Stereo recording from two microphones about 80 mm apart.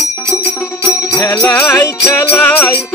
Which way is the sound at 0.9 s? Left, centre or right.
Left.